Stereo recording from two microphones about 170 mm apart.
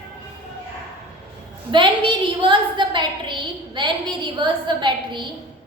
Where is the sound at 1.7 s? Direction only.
30° right (ahead or behind).